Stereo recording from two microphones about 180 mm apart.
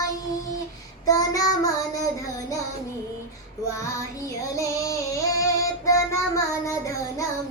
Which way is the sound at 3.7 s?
15° left (ahead or behind).